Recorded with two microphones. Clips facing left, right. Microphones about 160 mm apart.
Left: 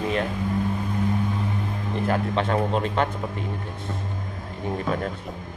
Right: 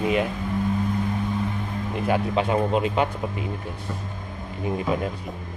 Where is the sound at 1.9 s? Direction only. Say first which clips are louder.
Right 1 dB; 5° right (ahead or behind).